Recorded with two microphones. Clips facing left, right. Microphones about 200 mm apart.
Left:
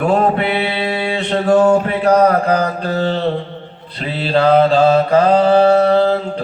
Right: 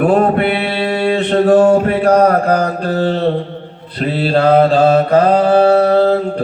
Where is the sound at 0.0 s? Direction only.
50° right (ahead or behind).